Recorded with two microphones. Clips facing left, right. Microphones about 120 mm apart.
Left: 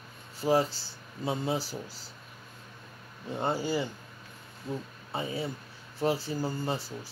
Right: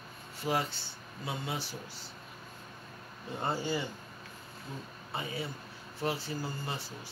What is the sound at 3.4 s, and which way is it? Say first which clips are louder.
Speech: left 4 dB; 30° left (ahead or behind).